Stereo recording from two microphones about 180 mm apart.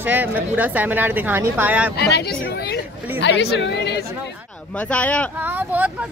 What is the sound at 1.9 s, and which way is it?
A woman's voice, 65° left (ahead or behind).